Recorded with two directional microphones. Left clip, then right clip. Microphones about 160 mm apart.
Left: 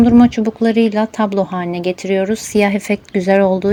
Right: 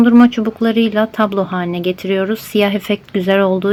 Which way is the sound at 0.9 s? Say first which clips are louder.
Right 2 dB; 15° left (ahead or behind).